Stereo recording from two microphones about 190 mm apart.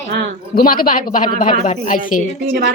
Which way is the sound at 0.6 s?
50° left (ahead or behind).